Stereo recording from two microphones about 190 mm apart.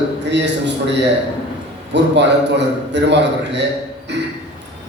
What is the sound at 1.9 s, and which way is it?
A man's voice, 65° right (ahead or behind).